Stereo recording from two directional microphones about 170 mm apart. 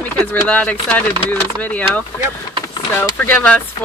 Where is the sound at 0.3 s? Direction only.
10° left (ahead or behind).